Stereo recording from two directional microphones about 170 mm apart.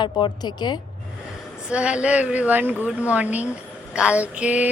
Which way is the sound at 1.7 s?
5° right (ahead or behind).